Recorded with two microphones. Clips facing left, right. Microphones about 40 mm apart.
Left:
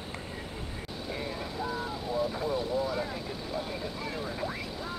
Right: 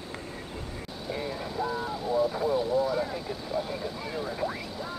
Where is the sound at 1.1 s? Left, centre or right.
Centre.